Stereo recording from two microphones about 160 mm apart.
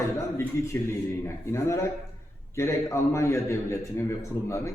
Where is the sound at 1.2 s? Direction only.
15° left (ahead or behind).